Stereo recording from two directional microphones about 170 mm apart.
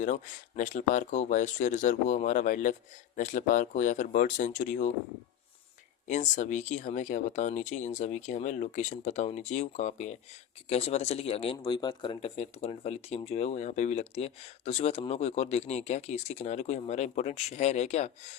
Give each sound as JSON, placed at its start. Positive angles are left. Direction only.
{"t": 0.0, "sound": "speech", "side_deg": 45}
{"t": 6.1, "sound": "speech", "side_deg": 45}